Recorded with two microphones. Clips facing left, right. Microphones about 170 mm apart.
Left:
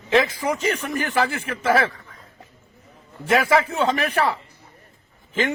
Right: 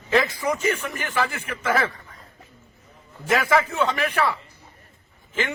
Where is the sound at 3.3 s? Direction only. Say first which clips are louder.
Left 2 dB; 25° left (ahead or behind).